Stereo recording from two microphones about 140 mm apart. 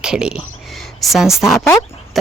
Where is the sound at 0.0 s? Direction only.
5° right (ahead or behind).